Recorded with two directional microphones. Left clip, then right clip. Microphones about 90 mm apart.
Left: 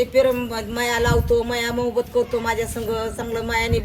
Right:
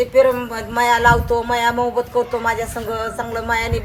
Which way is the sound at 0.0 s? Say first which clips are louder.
Right 4 dB; 25° left (ahead or behind).